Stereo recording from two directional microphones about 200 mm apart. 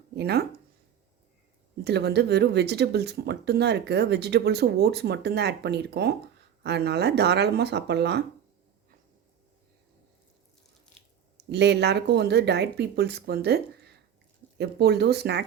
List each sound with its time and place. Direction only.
0.2 s speech: 55° right (ahead or behind)
1.8 s speech: 55° right (ahead or behind)
11.4 s speech: 60° right (ahead or behind)